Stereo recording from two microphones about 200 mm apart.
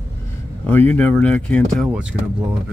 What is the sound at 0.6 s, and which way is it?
Speech, 10° left (ahead or behind).